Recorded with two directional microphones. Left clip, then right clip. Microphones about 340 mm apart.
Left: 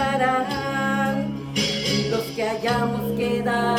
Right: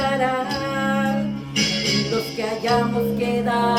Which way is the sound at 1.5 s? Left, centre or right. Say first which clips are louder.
Right 2 dB; centre.